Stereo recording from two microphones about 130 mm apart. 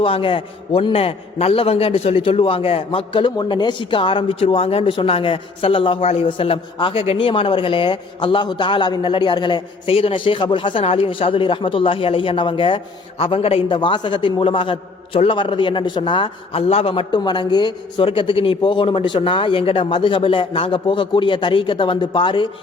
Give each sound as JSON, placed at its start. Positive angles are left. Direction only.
{"t": 0.0, "sound": "a man's voice", "side_deg": 45}